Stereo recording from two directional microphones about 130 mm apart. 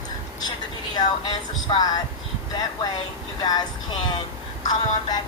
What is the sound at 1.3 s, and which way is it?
Speech, 30° left (ahead or behind).